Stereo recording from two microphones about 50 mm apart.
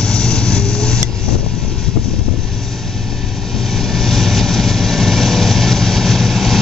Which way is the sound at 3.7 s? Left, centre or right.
Centre.